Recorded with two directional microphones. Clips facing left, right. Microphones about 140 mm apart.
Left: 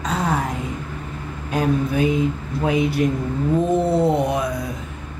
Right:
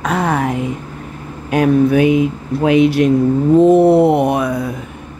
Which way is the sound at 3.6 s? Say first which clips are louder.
Right 10 dB; 75° right (ahead or behind).